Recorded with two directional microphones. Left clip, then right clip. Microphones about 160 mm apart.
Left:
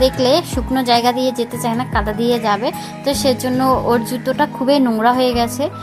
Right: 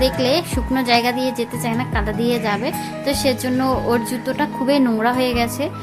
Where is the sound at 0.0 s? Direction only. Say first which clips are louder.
Left 4 dB; 15° left (ahead or behind).